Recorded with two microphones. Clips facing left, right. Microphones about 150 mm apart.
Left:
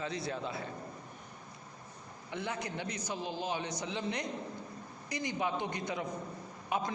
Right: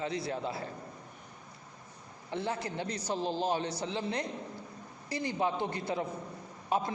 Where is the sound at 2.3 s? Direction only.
30° right (ahead or behind).